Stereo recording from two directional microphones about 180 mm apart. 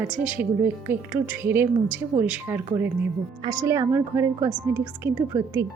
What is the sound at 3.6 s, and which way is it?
A woman's voice, 20° right (ahead or behind).